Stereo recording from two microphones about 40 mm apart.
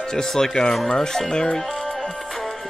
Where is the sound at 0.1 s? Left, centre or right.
Centre.